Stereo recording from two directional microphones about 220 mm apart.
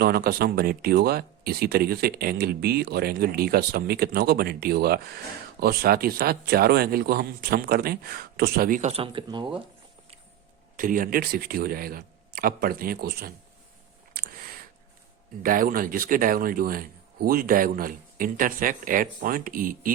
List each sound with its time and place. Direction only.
0.0 s speech: 45° right (ahead or behind); by 9.6 s 20° right (ahead or behind)
10.8 s speech: 40° right (ahead or behind)
14.1 s a sound: 45° right (ahead or behind)
15.4 s speech: 40° right (ahead or behind)